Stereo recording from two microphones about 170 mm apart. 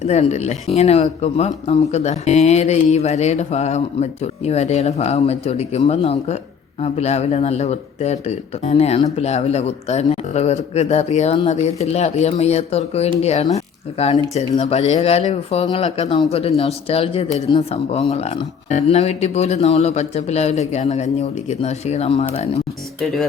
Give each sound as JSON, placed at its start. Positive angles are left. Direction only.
{"t": 0.0, "sound": "speech", "side_deg": 40}
{"t": 23.0, "sound": "speech", "side_deg": 0}